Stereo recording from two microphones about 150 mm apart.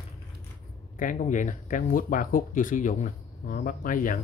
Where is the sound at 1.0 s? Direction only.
60° left (ahead or behind).